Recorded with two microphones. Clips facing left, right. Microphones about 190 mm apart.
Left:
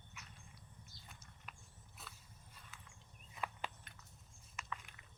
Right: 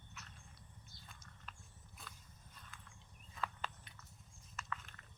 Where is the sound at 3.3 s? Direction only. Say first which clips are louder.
Even; 15° left (ahead or behind).